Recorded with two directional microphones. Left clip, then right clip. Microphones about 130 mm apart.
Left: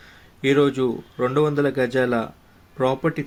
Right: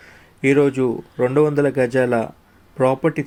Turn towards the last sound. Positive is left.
turn(degrees=-20)  # may be behind; listen again after turning